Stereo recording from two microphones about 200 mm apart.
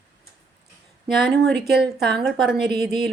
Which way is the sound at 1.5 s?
55° right (ahead or behind).